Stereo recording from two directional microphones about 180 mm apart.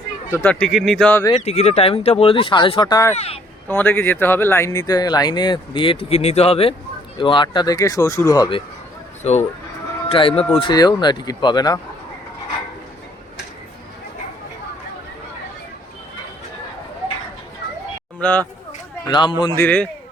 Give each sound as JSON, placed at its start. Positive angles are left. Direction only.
{"t": 0.3, "sound": "speech", "side_deg": 10}
{"t": 0.7, "sound": "speech", "side_deg": 0}
{"t": 1.4, "sound": "speech", "side_deg": 35}
{"t": 3.2, "sound": "speech", "side_deg": 35}
{"t": 3.7, "sound": "speech", "side_deg": 10}
{"t": 9.2, "sound": "speech", "side_deg": 40}
{"t": 18.2, "sound": "speech", "side_deg": 10}
{"t": 19.0, "sound": "speech", "side_deg": 25}
{"t": 19.5, "sound": "speech", "side_deg": 10}